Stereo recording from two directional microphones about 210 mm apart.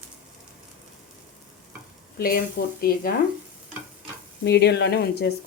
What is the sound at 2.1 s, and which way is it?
Speech, 45° left (ahead or behind).